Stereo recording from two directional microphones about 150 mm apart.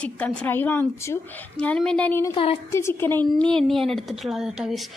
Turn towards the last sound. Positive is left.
turn(degrees=-5)  # may be behind; listen again after turning